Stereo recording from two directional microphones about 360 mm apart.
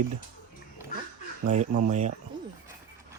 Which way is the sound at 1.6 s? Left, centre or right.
Centre.